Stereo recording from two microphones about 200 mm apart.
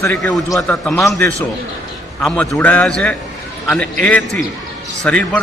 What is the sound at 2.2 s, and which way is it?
A man's voice, 5° left (ahead or behind).